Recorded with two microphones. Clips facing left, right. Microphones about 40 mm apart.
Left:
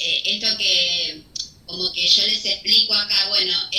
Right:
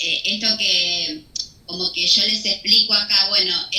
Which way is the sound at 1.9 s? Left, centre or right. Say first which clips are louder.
Left 1 dB; centre.